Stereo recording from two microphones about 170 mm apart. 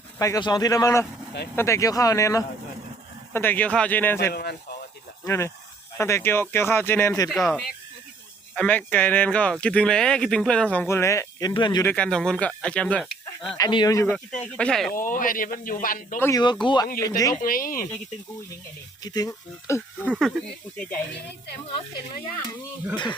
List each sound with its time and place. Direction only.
0.2 s a man's voice: 20° left (ahead or behind)
4.3 s speech: 65° left (ahead or behind)
5.2 s speech: 15° left (ahead or behind)
7.3 s speech: centre (ahead or behind); by 11.9 s 25° left (ahead or behind)
11.9 s speech: 5° left (ahead or behind)
13.6 s a man's voice: 25° left (ahead or behind)
14.1 s speech: 10° left (ahead or behind)
14.9 s speech: 55° left (ahead or behind)
16.1 s speech: 15° left (ahead or behind)
16.4 s a man's voice: 25° left (ahead or behind)
17.4 s speech: 55° left (ahead or behind)
19.0 s speech: 20° left (ahead or behind); by 20.8 s centre (ahead or behind)